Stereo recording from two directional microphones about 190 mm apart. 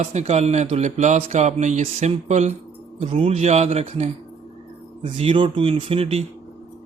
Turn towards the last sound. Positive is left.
turn(degrees=-30)  # may be behind; listen again after turning